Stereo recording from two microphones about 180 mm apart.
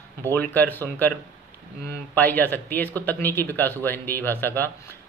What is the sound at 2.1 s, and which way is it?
Speech, 10° left (ahead or behind).